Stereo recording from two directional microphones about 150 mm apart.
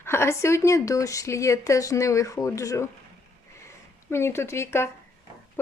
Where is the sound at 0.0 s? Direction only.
15° left (ahead or behind).